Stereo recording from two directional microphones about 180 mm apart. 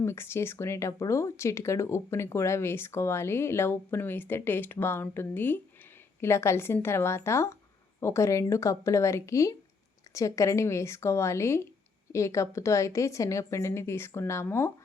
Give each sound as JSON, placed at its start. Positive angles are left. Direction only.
{"t": 0.0, "sound": "speech", "side_deg": 15}